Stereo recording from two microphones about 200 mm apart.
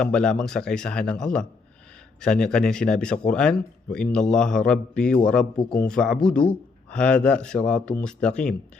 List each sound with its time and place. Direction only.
0.0 s speech: 5° left (ahead or behind)